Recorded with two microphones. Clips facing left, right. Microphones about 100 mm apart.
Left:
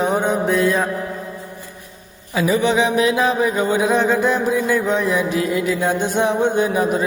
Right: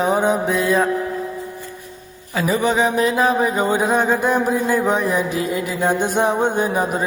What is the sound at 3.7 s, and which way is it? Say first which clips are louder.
Mantra: left 1 dB; 45° right (ahead or behind).